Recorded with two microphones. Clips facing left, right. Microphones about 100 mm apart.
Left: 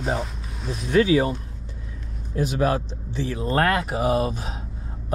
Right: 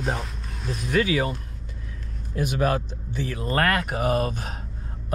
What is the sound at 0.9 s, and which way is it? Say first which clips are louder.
Speech: left 5 dB; 35° left (ahead or behind).